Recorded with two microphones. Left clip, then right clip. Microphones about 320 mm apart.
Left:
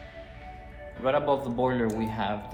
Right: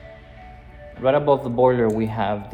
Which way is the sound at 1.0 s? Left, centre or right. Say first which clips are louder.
Right 7 dB; right.